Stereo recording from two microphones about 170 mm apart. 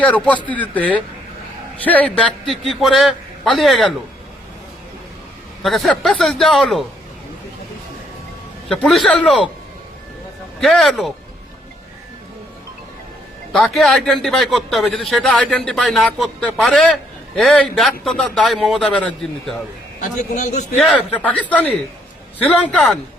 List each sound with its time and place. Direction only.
0.0 s a man's voice: 10° left (ahead or behind)
5.6 s a man's voice: centre (ahead or behind)
8.7 s a man's voice: centre (ahead or behind)
10.6 s a man's voice: centre (ahead or behind)
13.5 s a man's voice: 5° left (ahead or behind)
20.0 s a man's voice: 45° left (ahead or behind)
20.7 s a man's voice: 10° left (ahead or behind)